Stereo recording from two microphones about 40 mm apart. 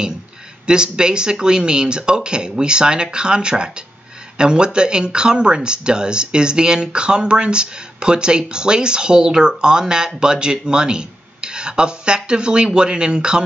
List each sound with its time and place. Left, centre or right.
0.7 s speech: right